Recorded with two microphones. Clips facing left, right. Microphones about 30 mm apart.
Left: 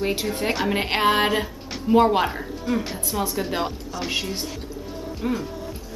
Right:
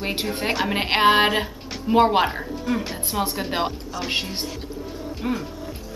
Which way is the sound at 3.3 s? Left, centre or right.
Centre.